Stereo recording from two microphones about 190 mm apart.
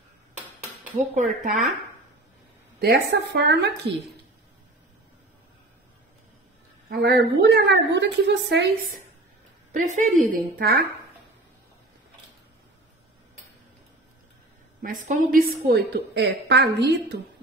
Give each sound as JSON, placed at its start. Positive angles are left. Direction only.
{"t": 0.9, "sound": "a woman's voice", "side_deg": -40}
{"t": 2.8, "sound": "a woman's voice", "side_deg": -60}
{"t": 6.9, "sound": "a woman's voice", "side_deg": -55}
{"t": 9.7, "sound": "a woman's voice", "side_deg": -40}
{"t": 10.6, "sound": "speech", "side_deg": -55}
{"t": 14.8, "sound": "a woman's voice", "side_deg": -45}